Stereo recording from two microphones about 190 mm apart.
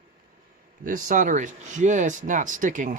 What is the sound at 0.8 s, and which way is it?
Speech, 45° right (ahead or behind).